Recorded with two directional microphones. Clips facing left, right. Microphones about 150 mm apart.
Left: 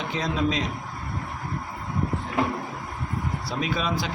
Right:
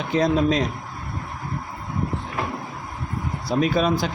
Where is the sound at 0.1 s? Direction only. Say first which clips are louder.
Right 8 dB; 45° right (ahead or behind).